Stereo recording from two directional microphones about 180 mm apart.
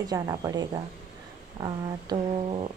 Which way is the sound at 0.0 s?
20° right (ahead or behind).